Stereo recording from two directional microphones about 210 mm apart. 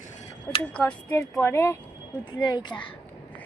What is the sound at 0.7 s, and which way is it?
Speech, 5° left (ahead or behind).